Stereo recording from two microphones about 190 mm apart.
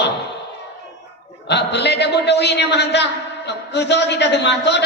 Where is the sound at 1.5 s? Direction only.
65° left (ahead or behind).